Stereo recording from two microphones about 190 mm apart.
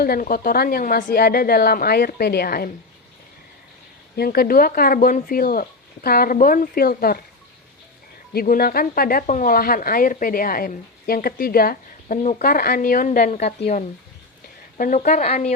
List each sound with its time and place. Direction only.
0.0 s speech: 50° left (ahead or behind)
4.2 s speech: 55° left (ahead or behind)
8.3 s speech: 50° left (ahead or behind)
14.8 s speech: 45° left (ahead or behind)